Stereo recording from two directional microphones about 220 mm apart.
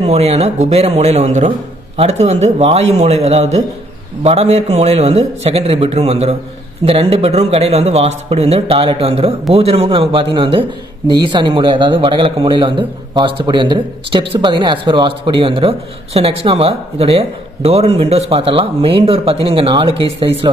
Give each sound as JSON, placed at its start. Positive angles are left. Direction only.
{"t": 0.0, "sound": "a man's voice", "side_deg": -30}